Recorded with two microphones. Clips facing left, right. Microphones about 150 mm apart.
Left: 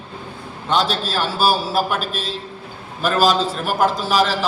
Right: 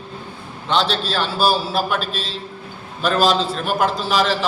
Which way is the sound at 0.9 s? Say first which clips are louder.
Even; 10° left (ahead or behind).